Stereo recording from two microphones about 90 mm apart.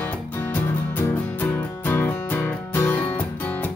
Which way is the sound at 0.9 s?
25° left (ahead or behind).